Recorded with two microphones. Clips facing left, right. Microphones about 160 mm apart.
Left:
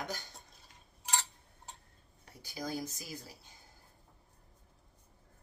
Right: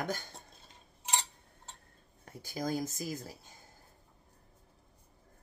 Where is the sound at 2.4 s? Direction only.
50° right (ahead or behind).